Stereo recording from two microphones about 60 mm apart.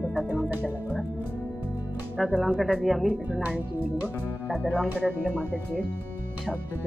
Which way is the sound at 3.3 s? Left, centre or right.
Right.